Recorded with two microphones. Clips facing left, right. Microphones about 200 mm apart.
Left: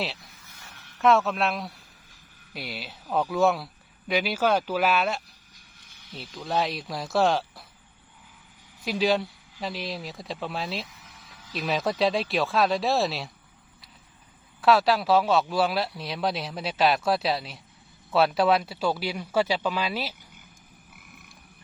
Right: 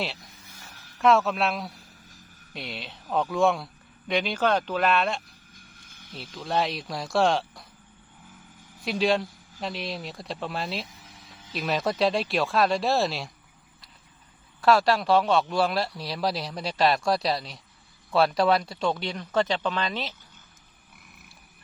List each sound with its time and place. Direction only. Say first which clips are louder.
0.9 s speech: even; centre (ahead or behind)
5.5 s a sound: right 7 dB; 50° right (ahead or behind)
6.3 s speech: even; centre (ahead or behind)
8.8 s speech: even; centre (ahead or behind)
14.6 s speech: even; centre (ahead or behind)